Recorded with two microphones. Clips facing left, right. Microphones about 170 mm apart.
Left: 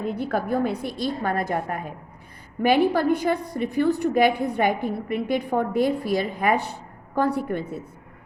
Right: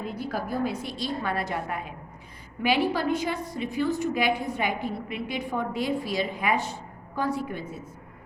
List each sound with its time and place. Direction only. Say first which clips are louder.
0.0 s a woman's voice: left 6 dB; 55° left (ahead or behind)